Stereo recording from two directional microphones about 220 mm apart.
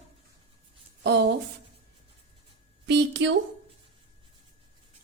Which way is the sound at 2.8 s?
55° right (ahead or behind).